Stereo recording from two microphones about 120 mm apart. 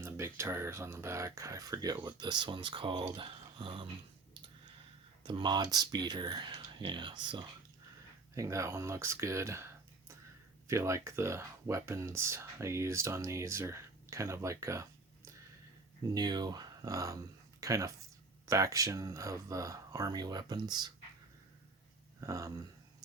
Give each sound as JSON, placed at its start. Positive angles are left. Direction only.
{"t": 0.0, "sound": "speech", "side_deg": -20}
{"t": 5.2, "sound": "speech", "side_deg": -40}
{"t": 8.4, "sound": "speech", "side_deg": -25}
{"t": 10.7, "sound": "speech", "side_deg": -25}
{"t": 16.1, "sound": "speech", "side_deg": -35}
{"t": 22.2, "sound": "speech", "side_deg": -25}